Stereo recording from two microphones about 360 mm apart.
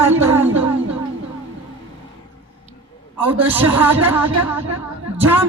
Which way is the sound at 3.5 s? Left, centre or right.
Centre.